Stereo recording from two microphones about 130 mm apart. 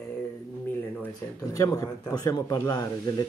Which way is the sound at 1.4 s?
25° left (ahead or behind).